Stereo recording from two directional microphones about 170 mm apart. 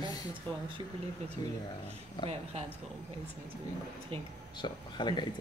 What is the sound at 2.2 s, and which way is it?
Speech, 30° left (ahead or behind).